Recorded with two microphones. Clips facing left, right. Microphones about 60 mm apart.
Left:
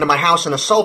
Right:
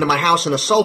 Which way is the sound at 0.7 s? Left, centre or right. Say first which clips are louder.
Left 1 dB; left.